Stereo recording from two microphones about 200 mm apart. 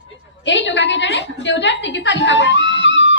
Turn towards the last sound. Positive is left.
turn(degrees=65)  # may be behind; listen again after turning